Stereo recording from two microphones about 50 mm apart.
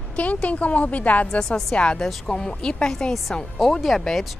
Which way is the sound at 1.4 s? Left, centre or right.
Centre.